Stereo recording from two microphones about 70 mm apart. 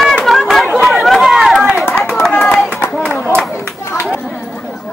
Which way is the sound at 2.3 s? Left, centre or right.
Centre.